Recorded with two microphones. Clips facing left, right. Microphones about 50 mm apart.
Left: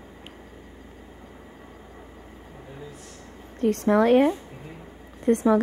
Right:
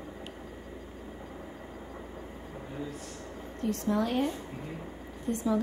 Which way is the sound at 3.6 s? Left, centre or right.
Left.